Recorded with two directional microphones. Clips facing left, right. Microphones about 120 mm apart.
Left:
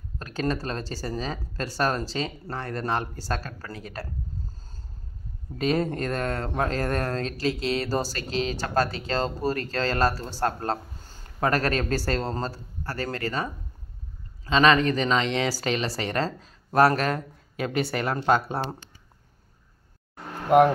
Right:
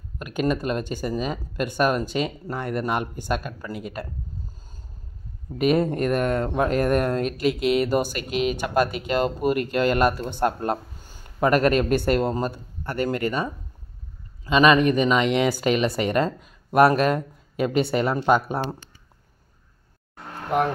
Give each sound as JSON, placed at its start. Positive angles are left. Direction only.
{"t": 0.2, "sound": "speech", "side_deg": -15}
{"t": 5.6, "sound": "speech", "side_deg": -20}